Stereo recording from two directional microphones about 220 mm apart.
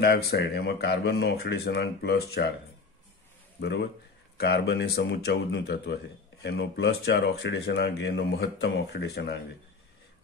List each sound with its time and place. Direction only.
0.0 s speech: 45° left (ahead or behind)
4.4 s speech: 50° left (ahead or behind)